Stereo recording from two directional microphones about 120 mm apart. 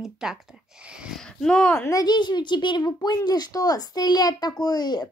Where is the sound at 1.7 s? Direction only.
20° left (ahead or behind).